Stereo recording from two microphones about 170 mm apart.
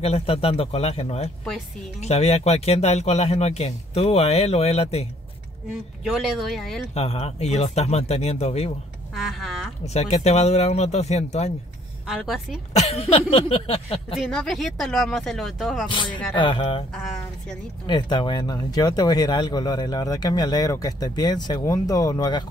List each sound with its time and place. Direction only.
0.0 s speech: 35° left (ahead or behind)
6.0 s speech: centre (ahead or behind)
6.9 s speech: 35° left (ahead or behind)
9.1 s speech: centre (ahead or behind)
9.9 s speech: 40° left (ahead or behind)
12.1 s speech: centre (ahead or behind)
12.7 s speech: 40° left (ahead or behind)
14.1 s speech: 5° left (ahead or behind)
15.9 s speech: 30° left (ahead or behind)
16.9 s speech: 5° left (ahead or behind)
17.8 s speech: 25° left (ahead or behind)